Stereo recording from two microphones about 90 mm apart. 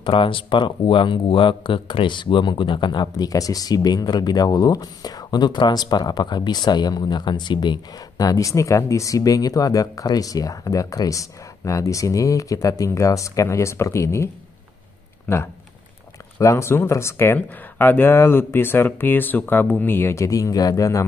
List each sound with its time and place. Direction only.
0.0 s speech: 70° left (ahead or behind); by 21.0 s 35° left (ahead or behind)